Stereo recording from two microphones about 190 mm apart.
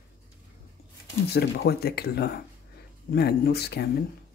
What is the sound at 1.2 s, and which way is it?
Speech, 55° left (ahead or behind).